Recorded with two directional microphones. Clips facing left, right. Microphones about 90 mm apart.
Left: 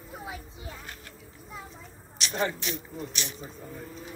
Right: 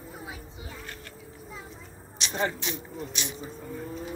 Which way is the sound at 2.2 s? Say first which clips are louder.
Even; 25° right (ahead or behind).